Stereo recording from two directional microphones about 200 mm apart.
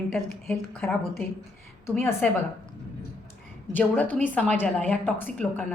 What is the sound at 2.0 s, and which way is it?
Speech, 10° left (ahead or behind).